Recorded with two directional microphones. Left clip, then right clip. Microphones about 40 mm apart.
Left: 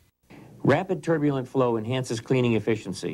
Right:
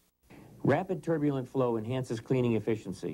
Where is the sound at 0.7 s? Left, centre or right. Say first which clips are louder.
Left 6 dB; right.